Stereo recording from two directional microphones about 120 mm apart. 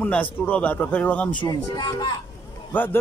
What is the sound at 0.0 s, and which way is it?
Speech, 15° left (ahead or behind).